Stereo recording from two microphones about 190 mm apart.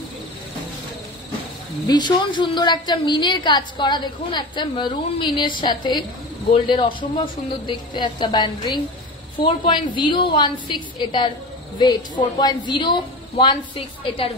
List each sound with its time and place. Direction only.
1.9 s a woman's voice: 20° left (ahead or behind)